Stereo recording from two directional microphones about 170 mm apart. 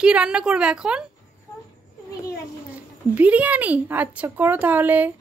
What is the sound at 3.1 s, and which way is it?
A woman's voice, 10° right (ahead or behind).